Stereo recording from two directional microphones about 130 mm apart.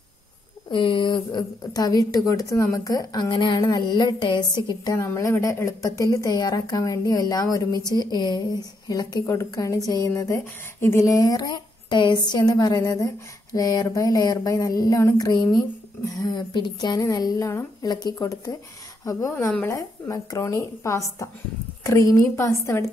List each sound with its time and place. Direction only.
0.7 s a woman's voice: 40° left (ahead or behind); by 22.8 s 20° left (ahead or behind)